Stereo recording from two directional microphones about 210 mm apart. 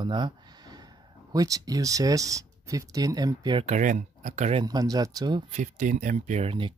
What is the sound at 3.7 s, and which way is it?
Speech, 35° right (ahead or behind).